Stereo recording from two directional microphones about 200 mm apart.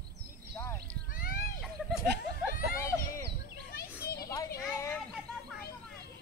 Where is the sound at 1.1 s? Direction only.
45° left (ahead or behind).